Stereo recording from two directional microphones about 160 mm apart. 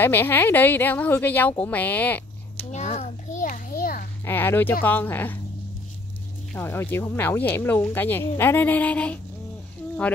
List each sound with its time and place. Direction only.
0.0 s speech: 15° left (ahead or behind)
2.7 s children playing: 45° left (ahead or behind); by 4.1 s 65° left (ahead or behind)
4.2 s speech: 15° left (ahead or behind)
6.5 s speech: 15° left (ahead or behind)